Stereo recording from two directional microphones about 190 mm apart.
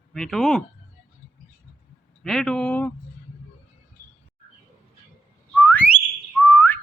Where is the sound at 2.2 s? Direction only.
Centre (ahead or behind).